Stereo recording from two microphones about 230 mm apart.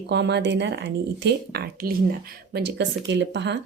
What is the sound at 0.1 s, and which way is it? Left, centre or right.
A woman's voice, right.